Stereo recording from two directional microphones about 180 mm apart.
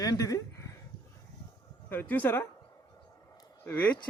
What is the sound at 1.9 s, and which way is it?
Speech, 10° left (ahead or behind).